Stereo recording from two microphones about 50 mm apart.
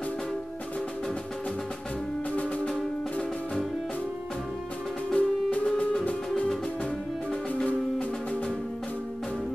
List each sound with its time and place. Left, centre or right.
2.3 s music: left
2.7 s music: centre
5.1 s music: left